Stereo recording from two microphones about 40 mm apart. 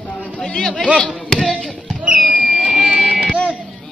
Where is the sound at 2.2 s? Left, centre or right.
Centre.